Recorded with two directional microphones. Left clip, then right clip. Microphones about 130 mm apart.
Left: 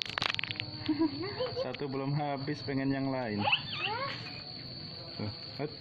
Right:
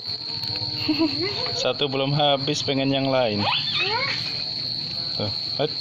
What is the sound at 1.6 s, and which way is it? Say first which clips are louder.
Speech: right 14 dB; 25° right (ahead or behind).